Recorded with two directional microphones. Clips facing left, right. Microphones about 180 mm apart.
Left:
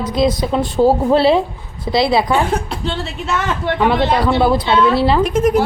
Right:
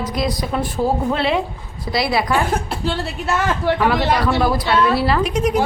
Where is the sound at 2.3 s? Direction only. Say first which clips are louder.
Left 2 dB; 5° right (ahead or behind).